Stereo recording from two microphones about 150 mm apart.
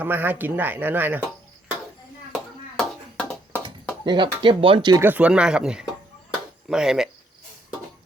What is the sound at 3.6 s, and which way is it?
Speech, 30° right (ahead or behind).